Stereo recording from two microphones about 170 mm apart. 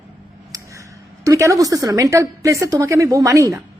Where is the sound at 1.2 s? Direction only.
20° right (ahead or behind).